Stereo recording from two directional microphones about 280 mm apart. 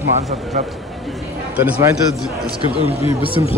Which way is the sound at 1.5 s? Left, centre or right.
Centre.